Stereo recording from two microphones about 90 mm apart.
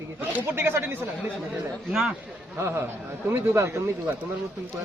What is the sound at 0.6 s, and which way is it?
Speech, 25° right (ahead or behind).